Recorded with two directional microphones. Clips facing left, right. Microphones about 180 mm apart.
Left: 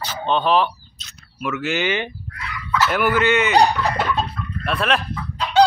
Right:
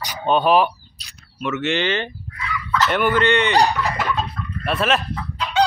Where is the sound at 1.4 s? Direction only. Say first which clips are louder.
Right 1 dB; centre (ahead or behind).